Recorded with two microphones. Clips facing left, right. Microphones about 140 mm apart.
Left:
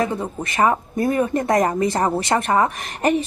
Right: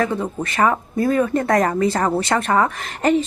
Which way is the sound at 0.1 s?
10° left (ahead or behind).